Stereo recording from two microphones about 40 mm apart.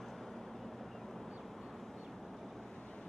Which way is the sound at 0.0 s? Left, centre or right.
Centre.